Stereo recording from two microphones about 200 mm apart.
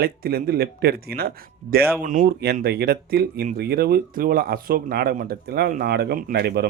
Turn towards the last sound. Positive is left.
turn(degrees=-55)  # may be behind; listen again after turning